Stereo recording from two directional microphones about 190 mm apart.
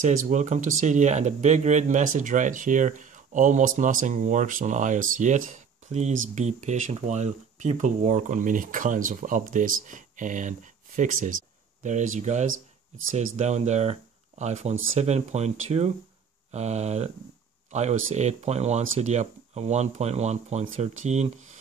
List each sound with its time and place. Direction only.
0.0 s speech: 40° right (ahead or behind)